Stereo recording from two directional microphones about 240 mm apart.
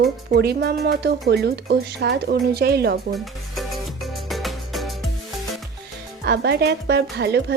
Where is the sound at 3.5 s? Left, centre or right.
Centre.